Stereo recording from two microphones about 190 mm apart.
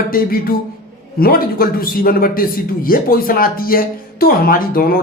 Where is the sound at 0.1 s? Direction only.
50° left (ahead or behind).